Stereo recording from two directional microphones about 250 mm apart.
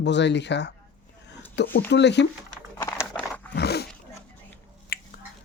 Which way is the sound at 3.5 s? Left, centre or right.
Left.